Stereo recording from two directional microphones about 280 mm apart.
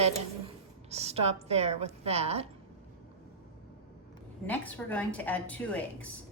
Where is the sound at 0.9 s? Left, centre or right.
Right.